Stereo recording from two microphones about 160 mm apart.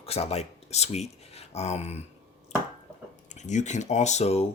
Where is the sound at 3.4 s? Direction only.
45° left (ahead or behind).